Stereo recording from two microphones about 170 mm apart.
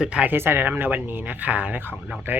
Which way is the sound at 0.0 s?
5° right (ahead or behind).